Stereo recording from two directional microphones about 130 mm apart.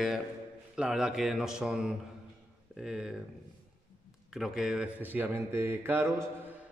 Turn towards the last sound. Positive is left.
turn(degrees=-15)  # may be behind; listen again after turning